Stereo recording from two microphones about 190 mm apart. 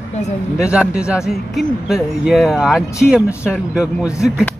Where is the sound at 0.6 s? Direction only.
5° right (ahead or behind).